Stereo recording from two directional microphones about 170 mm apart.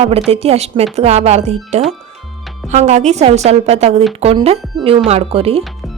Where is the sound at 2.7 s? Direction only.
45° right (ahead or behind).